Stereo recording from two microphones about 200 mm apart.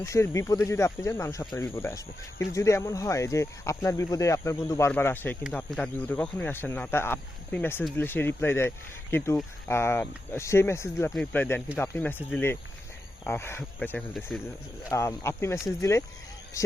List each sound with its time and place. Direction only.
0.0 s speech: 15° left (ahead or behind)